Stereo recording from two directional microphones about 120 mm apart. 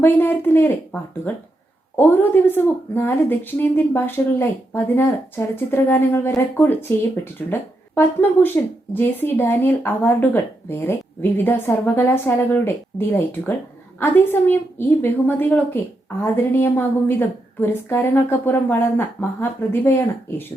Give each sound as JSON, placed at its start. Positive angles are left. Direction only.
{"t": 0.0, "sound": "a woman's voice", "side_deg": 20}